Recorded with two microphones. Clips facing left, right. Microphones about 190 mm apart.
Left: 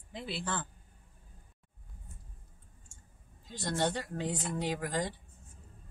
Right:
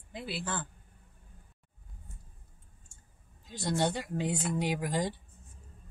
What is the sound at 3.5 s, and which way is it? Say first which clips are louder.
Speech: right 2 dB; 10° right (ahead or behind).